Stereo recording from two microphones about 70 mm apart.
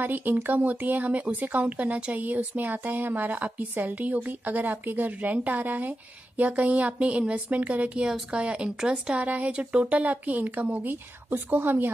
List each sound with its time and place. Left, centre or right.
0.0 s speech: right